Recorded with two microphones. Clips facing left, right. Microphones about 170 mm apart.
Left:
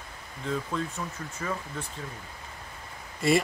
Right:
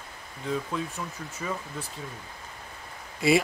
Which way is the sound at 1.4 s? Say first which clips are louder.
Even; 5° right (ahead or behind).